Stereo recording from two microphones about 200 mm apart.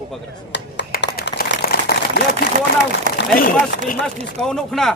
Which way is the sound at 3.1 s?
40° right (ahead or behind).